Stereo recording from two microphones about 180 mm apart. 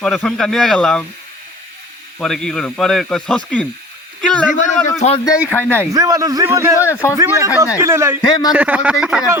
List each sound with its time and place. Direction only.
0.0 s speech: 5° left (ahead or behind)
2.1 s speech: 5° left (ahead or behind)
4.5 s a man's voice: 40° left (ahead or behind)
5.2 s speech: 15° left (ahead or behind)
5.8 s a man's voice: 20° right (ahead or behind)
6.7 s speech: 15° left (ahead or behind)
7.2 s a man's voice: 15° right (ahead or behind)